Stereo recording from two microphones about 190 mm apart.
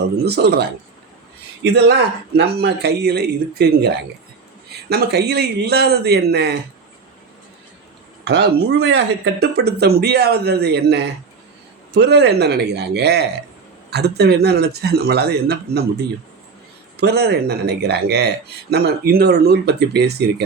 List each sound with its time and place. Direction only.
0.3 s speech: 60° right (ahead or behind)
1.6 s speech: 60° right (ahead or behind)
8.3 s speech: 65° right (ahead or behind)